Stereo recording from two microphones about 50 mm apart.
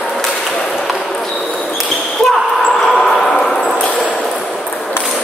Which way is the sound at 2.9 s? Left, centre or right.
Centre.